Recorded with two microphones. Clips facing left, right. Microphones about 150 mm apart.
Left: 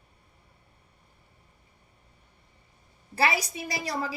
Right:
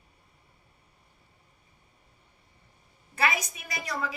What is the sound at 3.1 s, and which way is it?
A woman's voice, 30° left (ahead or behind).